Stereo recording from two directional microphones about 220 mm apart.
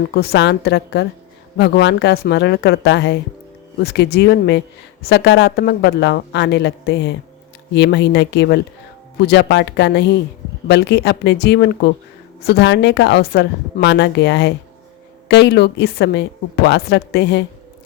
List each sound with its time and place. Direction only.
0.1 s speech: 45° left (ahead or behind)